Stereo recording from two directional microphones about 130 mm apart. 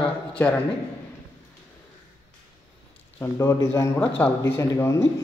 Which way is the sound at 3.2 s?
25° left (ahead or behind).